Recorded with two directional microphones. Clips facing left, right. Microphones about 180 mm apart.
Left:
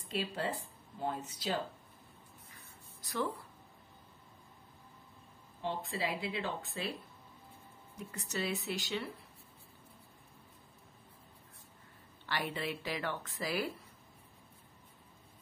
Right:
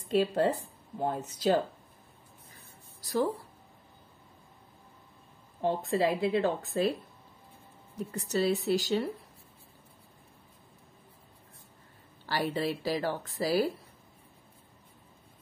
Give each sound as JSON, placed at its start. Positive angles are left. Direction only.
{"t": 0.1, "sound": "a woman's voice", "side_deg": -50}
{"t": 3.0, "sound": "a sound", "side_deg": -35}
{"t": 5.6, "sound": "a woman's voice", "side_deg": -45}
{"t": 8.1, "sound": "speech", "side_deg": -35}
{"t": 12.3, "sound": "speech", "side_deg": -35}